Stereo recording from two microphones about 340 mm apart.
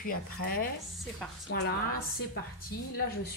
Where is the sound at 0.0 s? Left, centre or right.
Left.